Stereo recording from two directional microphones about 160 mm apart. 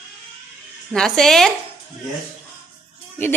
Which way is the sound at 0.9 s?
5° left (ahead or behind).